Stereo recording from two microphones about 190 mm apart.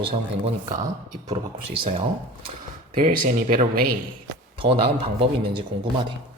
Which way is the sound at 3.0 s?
50° right (ahead or behind).